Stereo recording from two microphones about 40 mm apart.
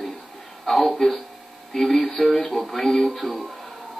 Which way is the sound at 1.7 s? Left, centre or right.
Centre.